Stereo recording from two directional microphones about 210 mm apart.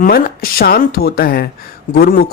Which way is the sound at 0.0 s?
45° left (ahead or behind).